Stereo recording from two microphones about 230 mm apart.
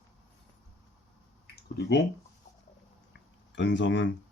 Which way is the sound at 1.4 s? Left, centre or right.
Left.